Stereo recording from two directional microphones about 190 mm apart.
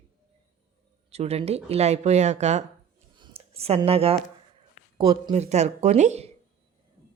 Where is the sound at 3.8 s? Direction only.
30° right (ahead or behind).